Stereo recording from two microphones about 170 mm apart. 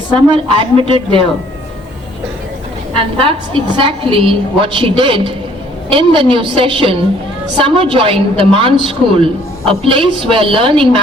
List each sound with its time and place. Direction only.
0.4 s a woman's voice: 30° right (ahead or behind)
2.9 s a woman's voice: 35° right (ahead or behind)